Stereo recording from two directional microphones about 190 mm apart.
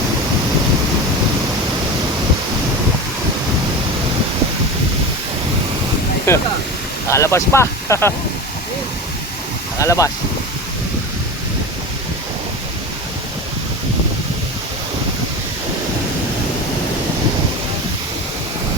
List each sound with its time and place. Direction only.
6.3 s speech: 15° left (ahead or behind)
9.7 s speech: 15° left (ahead or behind)